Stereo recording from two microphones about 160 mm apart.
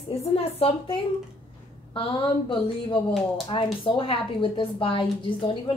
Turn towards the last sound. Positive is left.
turn(degrees=35)  # may be behind; listen again after turning